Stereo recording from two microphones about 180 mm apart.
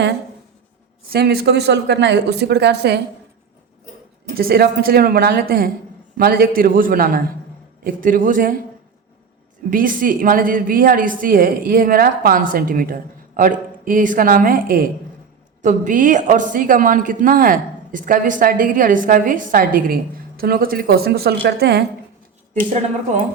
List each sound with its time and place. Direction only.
1.1 s speech: 60° right (ahead or behind)
4.4 s a woman's voice: 60° right (ahead or behind)
9.6 s a woman's voice: 50° right (ahead or behind); by 21.8 s 65° right (ahead or behind)
22.5 s a woman's voice: 50° right (ahead or behind)